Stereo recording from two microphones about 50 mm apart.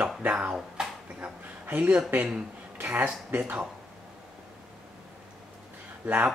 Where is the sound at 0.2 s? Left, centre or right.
Right.